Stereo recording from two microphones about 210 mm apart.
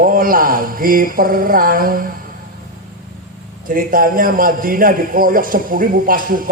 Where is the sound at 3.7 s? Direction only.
40° right (ahead or behind).